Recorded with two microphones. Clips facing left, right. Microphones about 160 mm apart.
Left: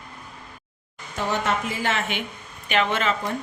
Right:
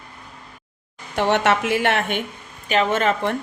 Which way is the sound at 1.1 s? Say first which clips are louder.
Right 6 dB; 70° right (ahead or behind).